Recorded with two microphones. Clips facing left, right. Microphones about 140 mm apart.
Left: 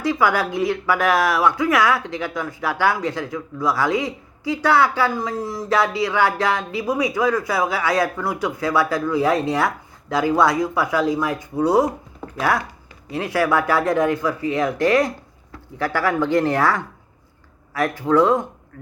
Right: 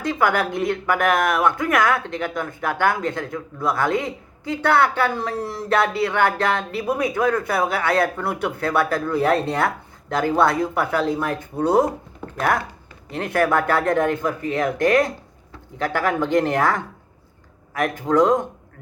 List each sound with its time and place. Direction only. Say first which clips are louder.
0.0 s speech: left 1 dB; 55° right (ahead or behind)
13.1 s speech: even; 55° right (ahead or behind)
17.9 s speech: left 1 dB; 45° right (ahead or behind)